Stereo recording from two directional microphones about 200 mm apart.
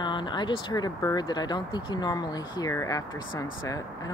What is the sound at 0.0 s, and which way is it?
Speech, 25° left (ahead or behind).